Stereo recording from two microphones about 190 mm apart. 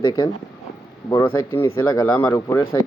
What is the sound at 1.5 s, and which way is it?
Speech, 15° left (ahead or behind).